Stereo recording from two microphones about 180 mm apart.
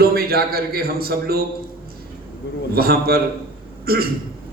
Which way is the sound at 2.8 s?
60° right (ahead or behind).